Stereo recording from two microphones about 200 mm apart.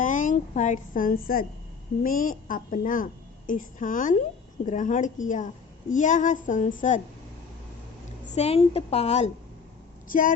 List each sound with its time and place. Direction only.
0.0 s a woman's voice: 40° left (ahead or behind)
8.3 s a woman's voice: 30° left (ahead or behind)